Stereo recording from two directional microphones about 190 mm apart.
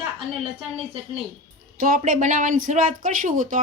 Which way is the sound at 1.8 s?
45° right (ahead or behind).